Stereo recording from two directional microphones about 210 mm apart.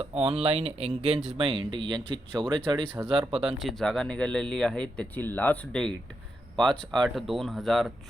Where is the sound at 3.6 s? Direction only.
Centre (ahead or behind).